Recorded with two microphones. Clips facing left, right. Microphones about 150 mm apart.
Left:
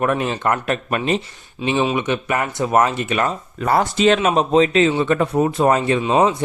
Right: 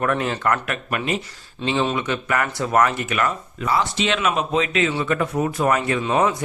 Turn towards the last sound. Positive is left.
turn(degrees=20)  # may be behind; listen again after turning